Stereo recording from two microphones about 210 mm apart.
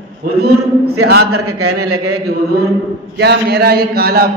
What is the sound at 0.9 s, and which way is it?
A man's voice, 90° right.